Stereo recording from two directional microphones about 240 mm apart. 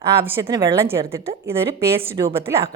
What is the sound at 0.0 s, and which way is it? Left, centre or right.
Speech, centre.